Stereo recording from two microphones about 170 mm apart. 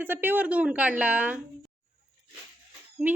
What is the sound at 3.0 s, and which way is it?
Speech, 10° right (ahead or behind).